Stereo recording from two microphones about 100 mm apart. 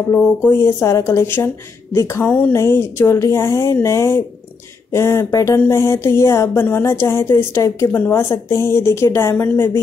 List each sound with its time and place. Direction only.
0.7 s speech: 30° left (ahead or behind)
2.2 s speech: 15° left (ahead or behind)